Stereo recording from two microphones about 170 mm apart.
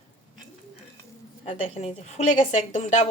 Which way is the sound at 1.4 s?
40° left (ahead or behind).